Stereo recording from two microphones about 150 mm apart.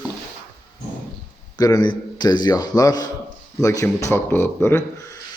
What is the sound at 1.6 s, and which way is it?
A man's voice, 25° left (ahead or behind).